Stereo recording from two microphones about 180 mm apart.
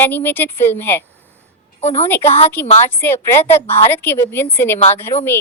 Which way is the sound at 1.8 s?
40° left (ahead or behind).